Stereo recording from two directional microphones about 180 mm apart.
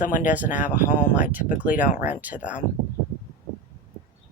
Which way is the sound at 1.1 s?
10° right (ahead or behind).